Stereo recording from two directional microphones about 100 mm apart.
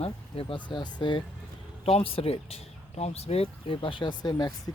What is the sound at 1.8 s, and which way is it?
Speech, 85° left.